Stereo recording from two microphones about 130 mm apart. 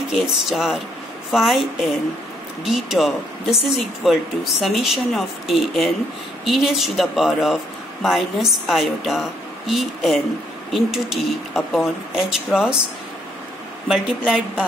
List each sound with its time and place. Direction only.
0.1 s speech: centre (ahead or behind)
13.8 s a woman's voice: 5° right (ahead or behind)